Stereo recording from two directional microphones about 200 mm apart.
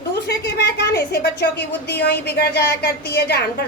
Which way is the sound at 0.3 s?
55° left (ahead or behind).